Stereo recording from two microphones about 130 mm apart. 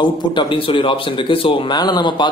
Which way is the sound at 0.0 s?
40° left (ahead or behind).